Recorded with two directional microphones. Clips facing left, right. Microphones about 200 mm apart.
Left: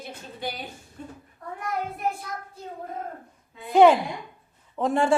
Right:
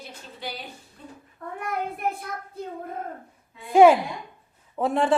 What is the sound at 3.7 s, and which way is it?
A woman's voice, 5° right (ahead or behind).